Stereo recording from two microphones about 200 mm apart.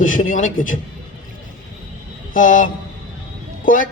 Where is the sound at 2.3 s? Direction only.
40° left (ahead or behind).